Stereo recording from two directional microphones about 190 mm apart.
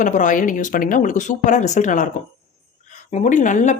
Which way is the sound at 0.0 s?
40° left (ahead or behind).